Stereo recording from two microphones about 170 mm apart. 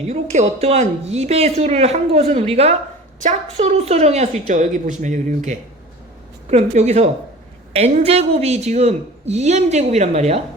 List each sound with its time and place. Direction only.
0.1 s a woman's voice: 40° right (ahead or behind)